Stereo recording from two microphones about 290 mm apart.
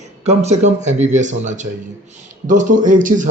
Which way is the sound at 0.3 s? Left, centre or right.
Right.